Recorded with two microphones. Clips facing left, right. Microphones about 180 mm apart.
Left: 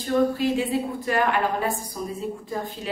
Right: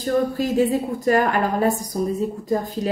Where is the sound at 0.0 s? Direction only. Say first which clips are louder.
Right 1 dB; 40° right (ahead or behind).